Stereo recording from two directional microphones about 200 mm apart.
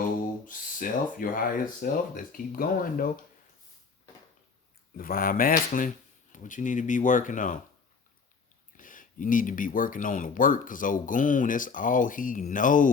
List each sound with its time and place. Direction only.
0.4 s speech: 40° left (ahead or behind)
4.9 s speech: 45° left (ahead or behind)
8.7 s speech: 40° left (ahead or behind)